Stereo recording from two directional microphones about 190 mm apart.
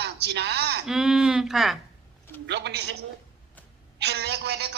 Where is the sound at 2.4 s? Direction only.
60° right (ahead or behind).